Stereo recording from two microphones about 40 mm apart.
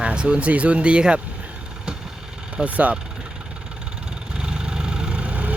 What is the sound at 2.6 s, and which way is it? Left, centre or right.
Speech, right.